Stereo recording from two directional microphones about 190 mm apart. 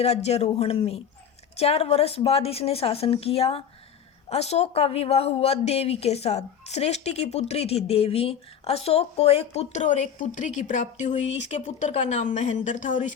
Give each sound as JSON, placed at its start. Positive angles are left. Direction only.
{"t": 0.0, "sound": "speech", "side_deg": 35}